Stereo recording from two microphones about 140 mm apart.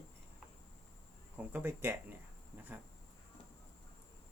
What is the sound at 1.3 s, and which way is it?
Speech, 15° right (ahead or behind).